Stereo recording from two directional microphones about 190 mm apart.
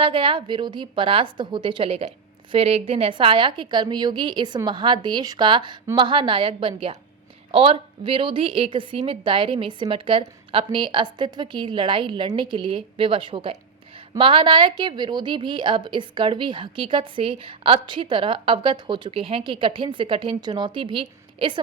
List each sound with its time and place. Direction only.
0.0 s speech: 30° right (ahead or behind)